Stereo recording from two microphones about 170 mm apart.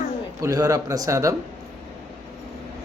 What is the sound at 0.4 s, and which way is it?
Speech, 20° right (ahead or behind).